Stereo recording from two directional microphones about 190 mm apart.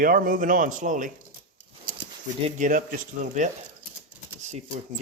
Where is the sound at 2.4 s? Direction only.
40° right (ahead or behind).